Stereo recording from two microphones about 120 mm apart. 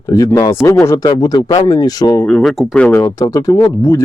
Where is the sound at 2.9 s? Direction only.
25° left (ahead or behind).